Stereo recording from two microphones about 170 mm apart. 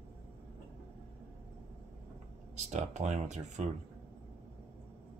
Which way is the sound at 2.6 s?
40° right (ahead or behind).